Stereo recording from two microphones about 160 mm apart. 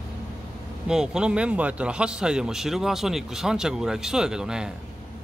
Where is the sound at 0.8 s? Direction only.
5° right (ahead or behind).